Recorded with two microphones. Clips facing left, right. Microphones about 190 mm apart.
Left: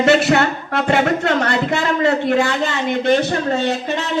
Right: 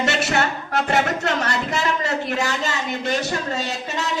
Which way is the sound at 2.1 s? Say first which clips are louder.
Left 7 dB; 30° left (ahead or behind).